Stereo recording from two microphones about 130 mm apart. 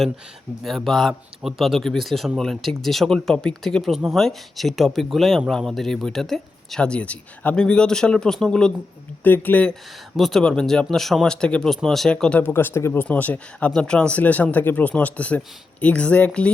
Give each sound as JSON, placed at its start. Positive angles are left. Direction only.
{"t": 0.9, "sound": "speech", "side_deg": 5}
{"t": 10.2, "sound": "speech", "side_deg": 0}